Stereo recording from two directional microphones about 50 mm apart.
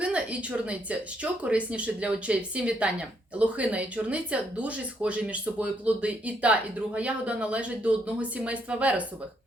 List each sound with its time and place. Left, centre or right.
0.0 s speech: right